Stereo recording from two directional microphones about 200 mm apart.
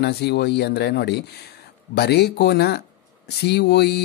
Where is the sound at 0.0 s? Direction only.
55° left (ahead or behind).